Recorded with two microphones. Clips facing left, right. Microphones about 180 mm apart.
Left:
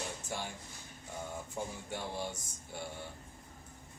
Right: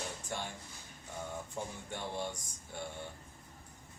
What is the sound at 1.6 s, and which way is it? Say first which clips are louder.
Speech: left 3 dB; 5° left (ahead or behind).